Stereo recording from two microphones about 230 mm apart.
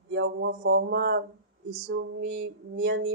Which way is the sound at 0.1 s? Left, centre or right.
Right.